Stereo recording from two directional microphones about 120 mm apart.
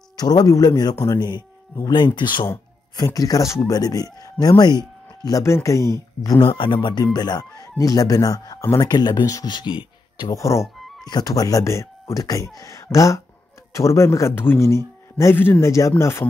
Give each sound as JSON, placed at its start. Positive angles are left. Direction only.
{"t": 0.2, "sound": "speech", "side_deg": 30}
{"t": 3.0, "sound": "speech", "side_deg": 30}
{"t": 6.4, "sound": "speech", "side_deg": 45}
{"t": 8.8, "sound": "speech", "side_deg": 35}
{"t": 10.3, "sound": "speech", "side_deg": 25}